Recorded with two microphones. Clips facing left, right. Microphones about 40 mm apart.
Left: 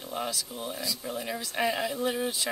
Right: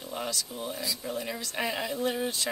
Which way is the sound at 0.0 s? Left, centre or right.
Centre.